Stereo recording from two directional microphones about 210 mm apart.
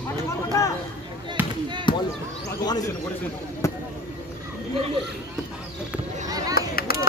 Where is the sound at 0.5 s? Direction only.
15° left (ahead or behind).